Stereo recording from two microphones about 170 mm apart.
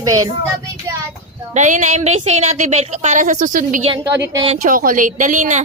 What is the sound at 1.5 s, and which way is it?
A woman's voice, 45° right (ahead or behind).